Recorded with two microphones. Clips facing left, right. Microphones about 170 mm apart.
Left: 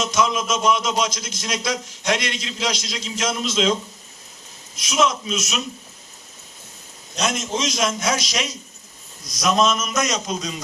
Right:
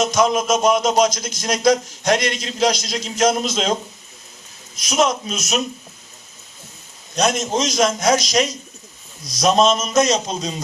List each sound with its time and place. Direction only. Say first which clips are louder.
0.0 s speech: right 4 dB; 40° right (ahead or behind)
4.8 s speech: right 2 dB; 40° right (ahead or behind)
7.2 s speech: right 5 dB; 40° right (ahead or behind)